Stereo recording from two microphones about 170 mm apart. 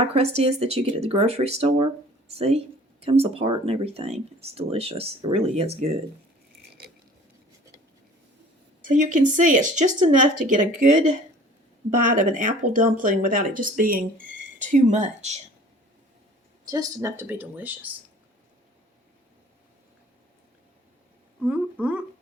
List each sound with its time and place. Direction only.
0.0 s speech: 40° right (ahead or behind)
8.9 s speech: 50° right (ahead or behind)
12.0 s speech: 50° right (ahead or behind)
16.6 s speech: 20° right (ahead or behind)
21.4 s a sound: 10° right (ahead or behind)